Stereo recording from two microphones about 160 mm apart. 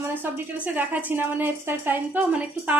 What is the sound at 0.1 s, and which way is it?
A woman's voice, 15° right (ahead or behind).